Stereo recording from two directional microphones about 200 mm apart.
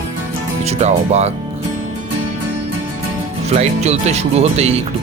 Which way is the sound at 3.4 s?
35° right (ahead or behind).